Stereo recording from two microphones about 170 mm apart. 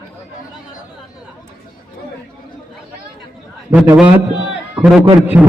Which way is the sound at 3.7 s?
10° right (ahead or behind).